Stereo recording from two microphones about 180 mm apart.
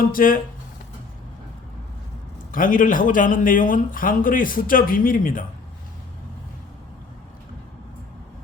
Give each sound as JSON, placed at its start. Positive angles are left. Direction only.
{"t": 0.1, "sound": "speech", "side_deg": 50}
{"t": 2.5, "sound": "speech", "side_deg": 50}